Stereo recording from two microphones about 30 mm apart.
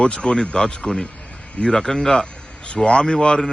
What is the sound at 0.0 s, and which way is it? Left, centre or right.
A man's voice, left.